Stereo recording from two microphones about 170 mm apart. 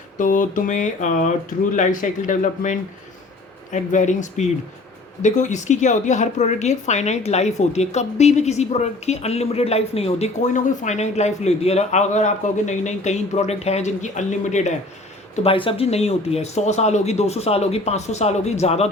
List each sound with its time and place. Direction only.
0.2 s a woman's voice: 50° left (ahead or behind)
15.4 s speech: 30° left (ahead or behind)